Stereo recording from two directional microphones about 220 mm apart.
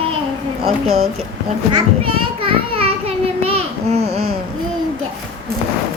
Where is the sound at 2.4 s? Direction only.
25° right (ahead or behind).